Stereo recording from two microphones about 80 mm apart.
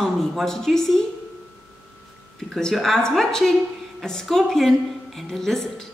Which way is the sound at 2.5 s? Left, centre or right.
Centre.